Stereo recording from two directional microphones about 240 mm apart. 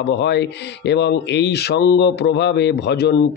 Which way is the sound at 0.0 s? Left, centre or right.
Left.